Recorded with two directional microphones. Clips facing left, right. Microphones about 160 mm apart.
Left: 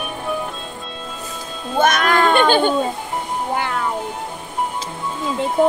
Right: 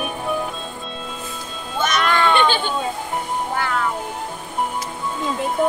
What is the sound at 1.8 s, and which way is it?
Children playing, 50° left (ahead or behind).